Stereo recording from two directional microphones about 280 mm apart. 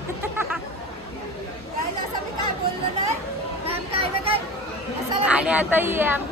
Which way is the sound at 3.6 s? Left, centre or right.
Centre.